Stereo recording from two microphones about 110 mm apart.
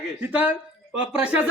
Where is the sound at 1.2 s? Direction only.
15° right (ahead or behind).